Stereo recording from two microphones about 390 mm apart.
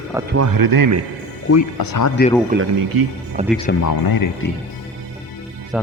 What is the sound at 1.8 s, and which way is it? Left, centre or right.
Speech, left.